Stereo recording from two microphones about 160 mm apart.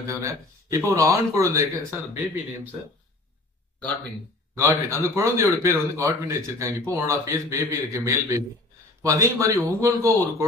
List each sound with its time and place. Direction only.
0.2 s speech: 20° right (ahead or behind)
4.6 s speech: 15° right (ahead or behind)